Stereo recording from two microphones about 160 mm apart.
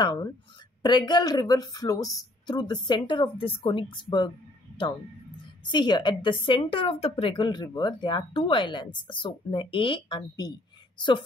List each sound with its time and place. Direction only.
0.0 s a woman's voice: 25° left (ahead or behind)
5.7 s a woman's voice: 25° left (ahead or behind)